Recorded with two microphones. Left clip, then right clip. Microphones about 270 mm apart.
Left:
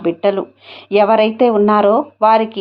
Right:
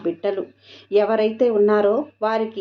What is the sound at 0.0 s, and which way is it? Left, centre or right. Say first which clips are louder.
Speech: left 8 dB; left.